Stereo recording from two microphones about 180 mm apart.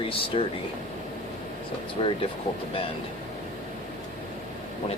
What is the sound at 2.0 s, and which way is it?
Speech, 30° left (ahead or behind).